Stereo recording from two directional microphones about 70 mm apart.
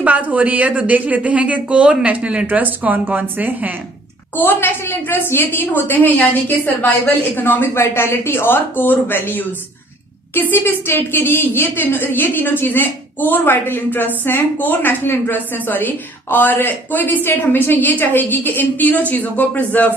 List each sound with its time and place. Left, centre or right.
0.0 s a woman's voice: right
4.4 s a woman's voice: left